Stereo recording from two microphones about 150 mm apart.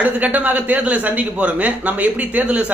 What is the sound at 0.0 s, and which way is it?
Speech, 10° right (ahead or behind).